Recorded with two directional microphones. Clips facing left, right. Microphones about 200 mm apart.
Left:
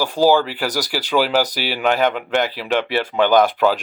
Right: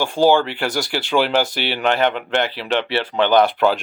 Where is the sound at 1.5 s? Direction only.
40° left (ahead or behind).